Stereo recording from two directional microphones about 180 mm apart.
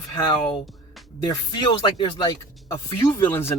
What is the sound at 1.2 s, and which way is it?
Speech, 25° left (ahead or behind).